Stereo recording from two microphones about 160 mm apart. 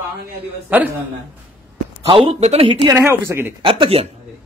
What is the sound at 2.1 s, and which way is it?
Speech, 40° right (ahead or behind).